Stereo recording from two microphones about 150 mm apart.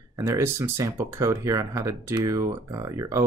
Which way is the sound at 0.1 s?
20° right (ahead or behind).